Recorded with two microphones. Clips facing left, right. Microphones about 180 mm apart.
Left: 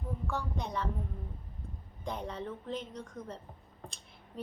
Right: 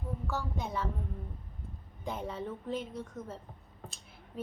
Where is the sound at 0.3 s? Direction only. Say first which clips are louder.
Even; 5° right (ahead or behind).